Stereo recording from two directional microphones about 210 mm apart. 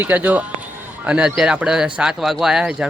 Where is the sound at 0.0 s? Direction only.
10° right (ahead or behind).